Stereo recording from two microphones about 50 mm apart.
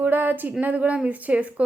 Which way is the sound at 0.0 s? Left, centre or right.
Right.